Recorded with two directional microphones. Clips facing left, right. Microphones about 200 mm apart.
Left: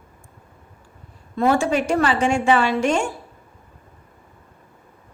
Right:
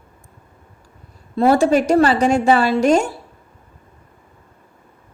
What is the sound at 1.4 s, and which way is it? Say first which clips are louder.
A woman's voice: right 5 dB; 40° right (ahead or behind).